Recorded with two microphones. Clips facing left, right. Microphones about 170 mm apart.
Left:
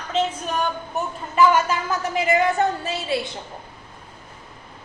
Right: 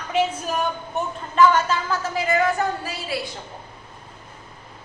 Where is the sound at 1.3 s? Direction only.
10° left (ahead or behind).